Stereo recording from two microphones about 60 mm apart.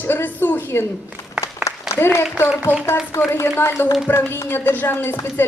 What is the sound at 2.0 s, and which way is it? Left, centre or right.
A woman's voice, left.